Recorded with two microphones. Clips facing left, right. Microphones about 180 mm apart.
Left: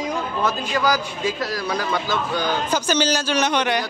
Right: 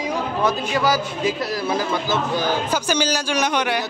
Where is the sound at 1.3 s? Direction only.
25° right (ahead or behind).